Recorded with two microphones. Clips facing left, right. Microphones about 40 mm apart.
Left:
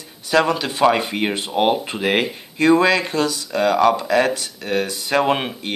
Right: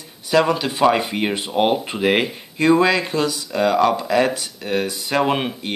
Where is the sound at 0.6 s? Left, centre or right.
Centre.